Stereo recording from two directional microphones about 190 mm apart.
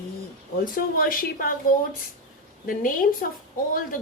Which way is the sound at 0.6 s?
50° left (ahead or behind).